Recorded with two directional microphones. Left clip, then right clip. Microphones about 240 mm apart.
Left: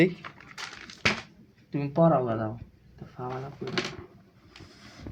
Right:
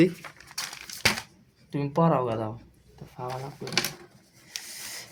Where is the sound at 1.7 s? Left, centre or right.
Right.